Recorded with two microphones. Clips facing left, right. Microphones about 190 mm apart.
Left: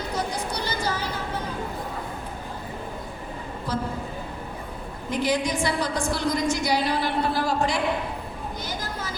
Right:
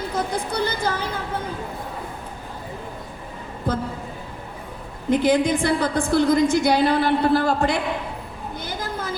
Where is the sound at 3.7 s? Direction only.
55° right (ahead or behind).